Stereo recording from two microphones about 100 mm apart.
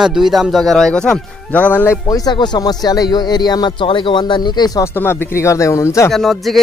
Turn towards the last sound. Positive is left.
turn(degrees=0)  # may be behind; listen again after turning